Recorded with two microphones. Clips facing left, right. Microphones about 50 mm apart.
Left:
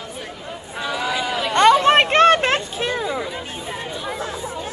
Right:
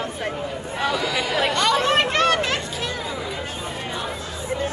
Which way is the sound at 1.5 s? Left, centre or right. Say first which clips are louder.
Left 10 dB; left.